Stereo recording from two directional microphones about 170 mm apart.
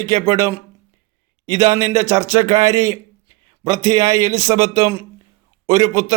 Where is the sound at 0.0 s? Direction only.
20° right (ahead or behind).